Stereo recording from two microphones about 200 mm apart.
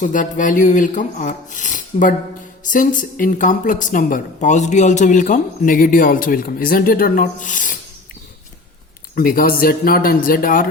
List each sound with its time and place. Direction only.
0.0 s speech: 40° left (ahead or behind)
9.1 s speech: 45° left (ahead or behind)